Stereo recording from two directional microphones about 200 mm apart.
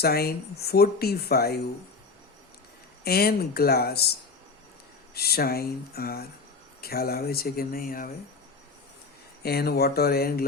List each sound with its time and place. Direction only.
0.0 s speech: 50° left (ahead or behind)
3.0 s speech: 50° left (ahead or behind)
9.4 s speech: 50° left (ahead or behind)